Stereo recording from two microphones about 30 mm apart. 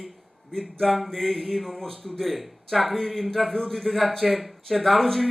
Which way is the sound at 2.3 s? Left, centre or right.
Centre.